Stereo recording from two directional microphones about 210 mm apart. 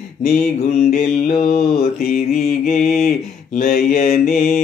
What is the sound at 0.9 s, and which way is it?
Mantra, 40° left (ahead or behind).